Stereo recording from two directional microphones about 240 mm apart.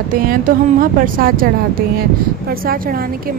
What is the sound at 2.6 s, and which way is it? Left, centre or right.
Speech, right.